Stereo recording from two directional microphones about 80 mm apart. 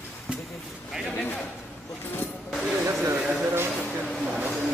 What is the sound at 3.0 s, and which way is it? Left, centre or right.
Speech, right.